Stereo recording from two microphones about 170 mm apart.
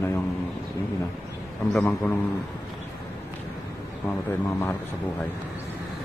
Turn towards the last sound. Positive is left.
turn(degrees=15)  # may be behind; listen again after turning